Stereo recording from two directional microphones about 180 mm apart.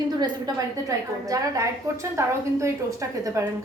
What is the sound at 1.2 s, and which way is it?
A woman's voice, 20° right (ahead or behind).